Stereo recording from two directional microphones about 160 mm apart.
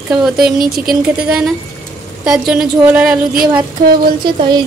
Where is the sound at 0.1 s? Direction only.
5° right (ahead or behind).